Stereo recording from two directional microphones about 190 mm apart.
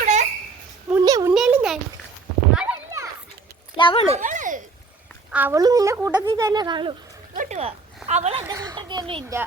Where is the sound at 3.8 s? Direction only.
25° left (ahead or behind).